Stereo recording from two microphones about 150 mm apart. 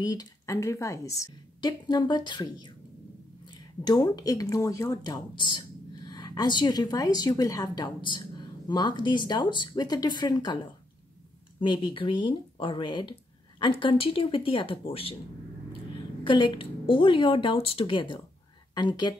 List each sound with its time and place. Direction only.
0.0 s speech: 25° left (ahead or behind)
16.3 s speech: 35° left (ahead or behind)